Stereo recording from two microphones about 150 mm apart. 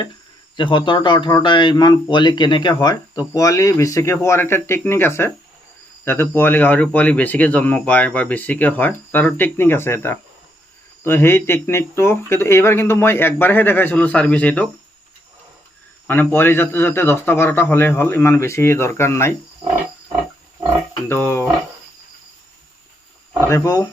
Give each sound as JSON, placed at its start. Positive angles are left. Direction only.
{"t": 0.5, "sound": "speech", "side_deg": 35}
{"t": 16.0, "sound": "speech", "side_deg": 15}
{"t": 21.1, "sound": "speech", "side_deg": 15}
{"t": 23.5, "sound": "speech", "side_deg": 25}